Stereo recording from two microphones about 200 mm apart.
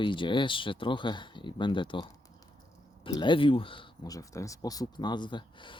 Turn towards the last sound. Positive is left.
turn(degrees=25)  # may be behind; listen again after turning